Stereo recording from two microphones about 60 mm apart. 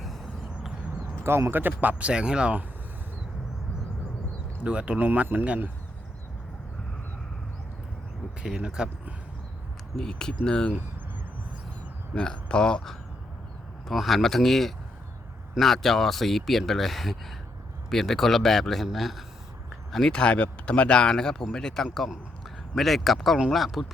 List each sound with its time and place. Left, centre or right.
0.0 s vehicle: centre
1.1 s a sound: right
1.5 s speech: right; by 2.6 s centre
4.6 s speech: centre
8.4 s speech: centre
10.0 s speech: centre
12.1 s speech: centre